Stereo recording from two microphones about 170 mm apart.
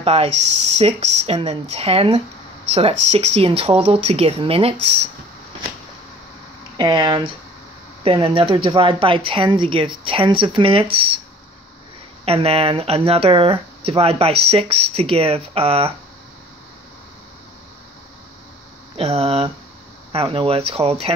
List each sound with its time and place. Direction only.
0.0 s speech: 35° right (ahead or behind)
6.8 s speech: 25° right (ahead or behind)
12.3 s speech: 35° right (ahead or behind)
18.9 s speech: 35° right (ahead or behind)